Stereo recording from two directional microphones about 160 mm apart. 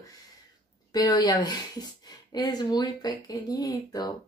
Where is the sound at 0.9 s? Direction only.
25° left (ahead or behind).